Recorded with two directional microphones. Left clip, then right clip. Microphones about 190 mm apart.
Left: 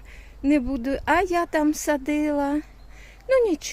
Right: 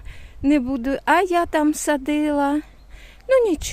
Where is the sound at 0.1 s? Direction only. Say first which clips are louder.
Right 3 dB; 25° right (ahead or behind).